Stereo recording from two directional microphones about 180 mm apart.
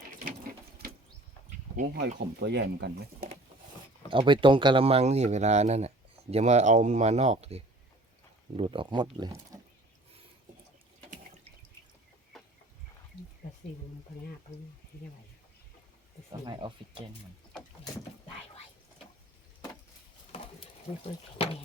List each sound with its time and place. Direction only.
1.7 s speech: 45° right (ahead or behind)
2.1 s speech: 70° right (ahead or behind)
4.1 s speech: 30° right (ahead or behind)
11.1 s water: 45° right (ahead or behind)
12.3 s a sound: centre (ahead or behind)
16.5 s speech: 25° right (ahead or behind)
20.9 s speech: 30° left (ahead or behind)